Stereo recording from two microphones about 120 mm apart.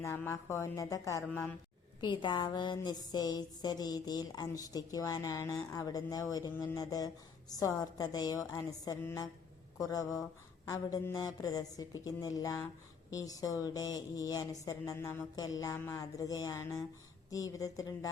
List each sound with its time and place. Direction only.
0.0 s speech: 20° left (ahead or behind)
1.3 s a woman's voice: 15° left (ahead or behind)
2.0 s a woman's voice: 40° left (ahead or behind)